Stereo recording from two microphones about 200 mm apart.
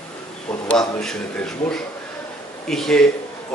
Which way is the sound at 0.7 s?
5° left (ahead or behind).